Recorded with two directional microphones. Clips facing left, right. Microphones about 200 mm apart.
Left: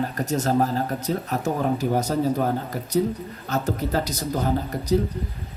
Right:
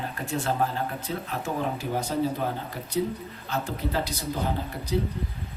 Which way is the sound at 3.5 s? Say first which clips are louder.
Left 5 dB; 40° left (ahead or behind).